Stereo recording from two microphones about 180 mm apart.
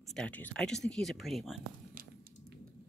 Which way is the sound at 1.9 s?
55° right (ahead or behind).